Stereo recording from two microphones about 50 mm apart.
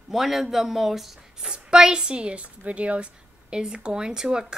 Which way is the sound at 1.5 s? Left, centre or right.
Centre.